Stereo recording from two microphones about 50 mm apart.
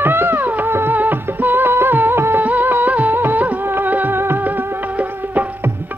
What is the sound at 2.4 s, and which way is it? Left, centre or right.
Music, right.